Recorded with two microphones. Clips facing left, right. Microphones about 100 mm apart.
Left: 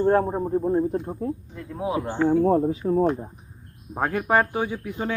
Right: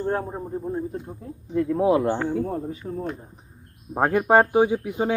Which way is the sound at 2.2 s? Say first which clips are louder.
Left 7 dB; 50° left (ahead or behind).